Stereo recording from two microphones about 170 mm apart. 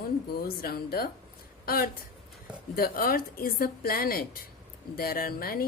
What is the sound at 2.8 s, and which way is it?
A woman's voice, 60° left (ahead or behind).